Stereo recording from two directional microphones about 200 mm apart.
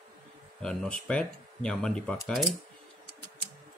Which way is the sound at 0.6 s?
5° left (ahead or behind).